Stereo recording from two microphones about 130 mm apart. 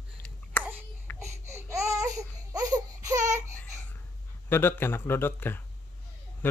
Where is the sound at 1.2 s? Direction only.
20° right (ahead or behind).